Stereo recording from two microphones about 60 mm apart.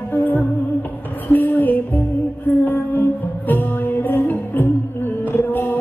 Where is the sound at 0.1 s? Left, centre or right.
Left.